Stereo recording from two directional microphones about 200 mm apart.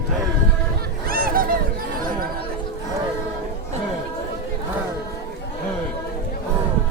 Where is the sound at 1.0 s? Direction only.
45° right (ahead or behind).